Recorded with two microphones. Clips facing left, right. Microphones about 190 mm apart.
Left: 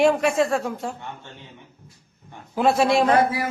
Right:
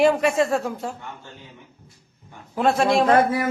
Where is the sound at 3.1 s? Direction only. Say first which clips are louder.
Right 1 dB; 50° right (ahead or behind).